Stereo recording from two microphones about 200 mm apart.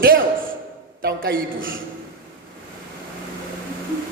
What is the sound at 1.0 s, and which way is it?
Speech, 45° right (ahead or behind).